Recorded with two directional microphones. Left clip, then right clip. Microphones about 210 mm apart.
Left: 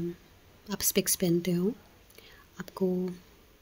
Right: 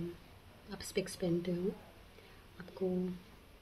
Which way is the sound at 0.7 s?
50° left (ahead or behind).